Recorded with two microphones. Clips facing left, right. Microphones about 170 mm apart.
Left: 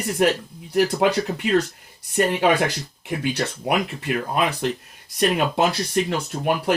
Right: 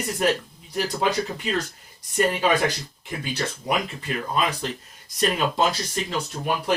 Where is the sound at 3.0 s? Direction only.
65° left (ahead or behind).